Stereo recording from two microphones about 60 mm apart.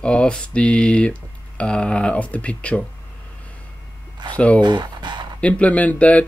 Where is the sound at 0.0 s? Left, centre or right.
Centre.